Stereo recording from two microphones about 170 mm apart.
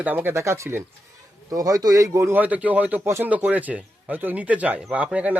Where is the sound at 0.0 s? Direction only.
10° right (ahead or behind).